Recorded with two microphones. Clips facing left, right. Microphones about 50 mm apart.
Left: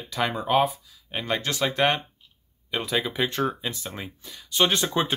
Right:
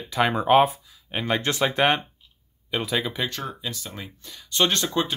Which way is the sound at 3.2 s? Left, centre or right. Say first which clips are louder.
Left 4 dB; left.